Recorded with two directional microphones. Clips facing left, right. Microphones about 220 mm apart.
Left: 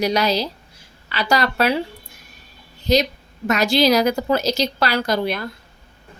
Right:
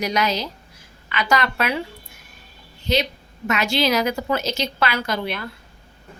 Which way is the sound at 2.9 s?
40° left (ahead or behind).